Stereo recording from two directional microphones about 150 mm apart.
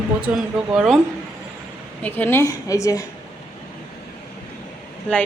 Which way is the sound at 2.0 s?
10° left (ahead or behind).